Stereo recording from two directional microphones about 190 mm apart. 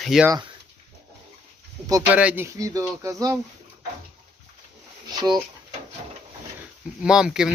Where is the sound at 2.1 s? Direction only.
5° right (ahead or behind).